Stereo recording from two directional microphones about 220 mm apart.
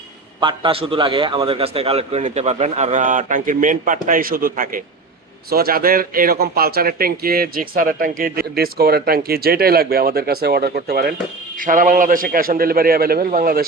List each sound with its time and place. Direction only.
0.3 s a man's voice: 20° right (ahead or behind); by 13.7 s 40° right (ahead or behind)